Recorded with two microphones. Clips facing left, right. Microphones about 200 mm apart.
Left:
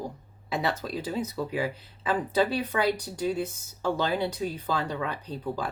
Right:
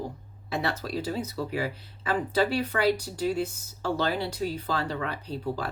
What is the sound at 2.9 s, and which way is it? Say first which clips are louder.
Speech: right 1 dB; 20° left (ahead or behind).